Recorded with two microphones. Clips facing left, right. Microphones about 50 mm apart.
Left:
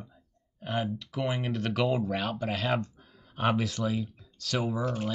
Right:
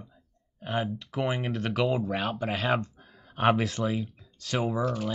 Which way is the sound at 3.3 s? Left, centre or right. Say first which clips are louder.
Right 4 dB; right.